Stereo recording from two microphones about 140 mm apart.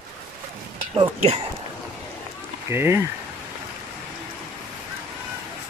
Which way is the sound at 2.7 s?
15° right (ahead or behind).